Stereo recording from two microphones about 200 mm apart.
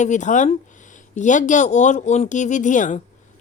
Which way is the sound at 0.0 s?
35° left (ahead or behind).